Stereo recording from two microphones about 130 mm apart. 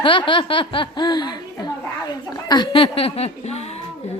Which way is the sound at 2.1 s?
30° left (ahead or behind).